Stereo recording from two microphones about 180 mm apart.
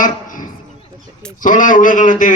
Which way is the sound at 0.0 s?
50° left (ahead or behind).